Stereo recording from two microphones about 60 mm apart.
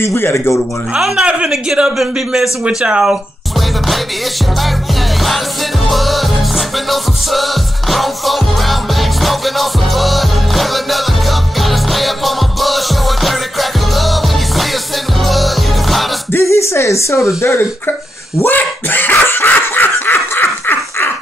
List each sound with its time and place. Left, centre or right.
0.0 s speech: left
1.5 s speech: centre
2.6 s speech: centre
5.9 s music: centre
15.2 s music: centre
16.3 s speech: left
17.4 s speech: left
18.4 s laughter: left